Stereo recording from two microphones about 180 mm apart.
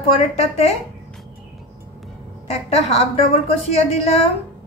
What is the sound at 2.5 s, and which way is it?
A woman's voice, 35° left (ahead or behind).